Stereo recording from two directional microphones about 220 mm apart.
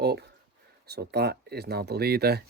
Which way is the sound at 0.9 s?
50° right (ahead or behind).